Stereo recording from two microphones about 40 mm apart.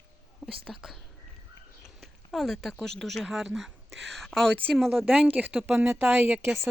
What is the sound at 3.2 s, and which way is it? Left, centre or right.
Speech, centre.